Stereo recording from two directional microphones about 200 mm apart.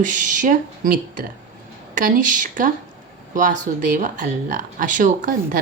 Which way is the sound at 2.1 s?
40° right (ahead or behind).